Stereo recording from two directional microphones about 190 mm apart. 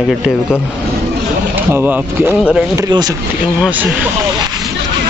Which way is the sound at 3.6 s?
5° right (ahead or behind).